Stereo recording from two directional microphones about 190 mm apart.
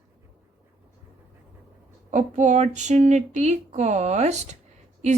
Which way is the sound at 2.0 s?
40° right (ahead or behind).